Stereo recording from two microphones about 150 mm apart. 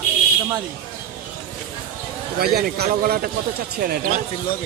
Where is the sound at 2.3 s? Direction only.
90° right.